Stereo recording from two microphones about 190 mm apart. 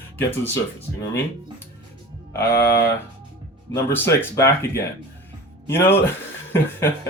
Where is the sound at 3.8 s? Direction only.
10° left (ahead or behind).